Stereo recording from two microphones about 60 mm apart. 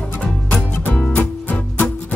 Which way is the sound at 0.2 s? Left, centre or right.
Left.